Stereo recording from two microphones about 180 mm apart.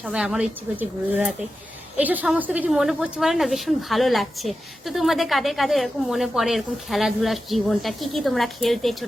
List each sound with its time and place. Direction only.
0.0 s a woman's voice: 5° right (ahead or behind)